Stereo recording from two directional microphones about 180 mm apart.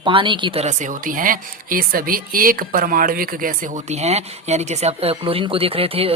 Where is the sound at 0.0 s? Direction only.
25° right (ahead or behind).